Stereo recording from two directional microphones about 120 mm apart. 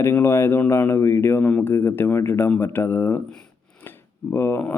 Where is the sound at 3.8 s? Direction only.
15° left (ahead or behind).